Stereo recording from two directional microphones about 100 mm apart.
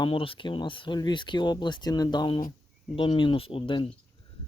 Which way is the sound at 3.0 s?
60° left (ahead or behind).